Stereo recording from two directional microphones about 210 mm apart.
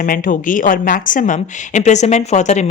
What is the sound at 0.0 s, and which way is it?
A woman's voice, 40° left (ahead or behind).